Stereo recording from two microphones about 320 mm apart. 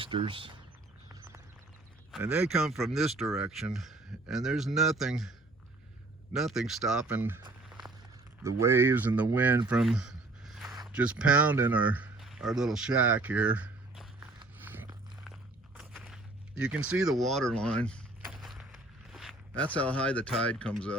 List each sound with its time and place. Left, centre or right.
0.0 s speech: centre
2.1 s speech: centre
6.3 s speech: centre
14.3 s a sound: centre